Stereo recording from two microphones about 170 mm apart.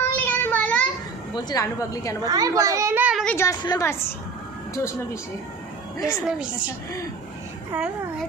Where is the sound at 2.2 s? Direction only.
20° right (ahead or behind).